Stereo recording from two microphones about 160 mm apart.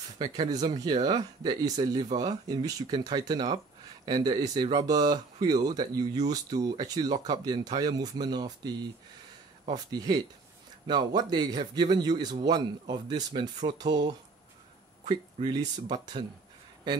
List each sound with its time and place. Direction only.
0.5 s speech: 25° right (ahead or behind)
9.8 s speech: 25° right (ahead or behind)
15.0 s speech: 30° right (ahead or behind)